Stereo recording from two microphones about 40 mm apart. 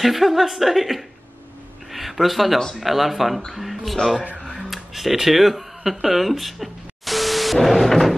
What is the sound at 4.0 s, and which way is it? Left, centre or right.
Speech, left.